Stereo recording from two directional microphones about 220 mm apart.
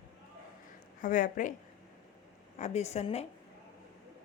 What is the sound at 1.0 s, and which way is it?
Speech, 35° left (ahead or behind).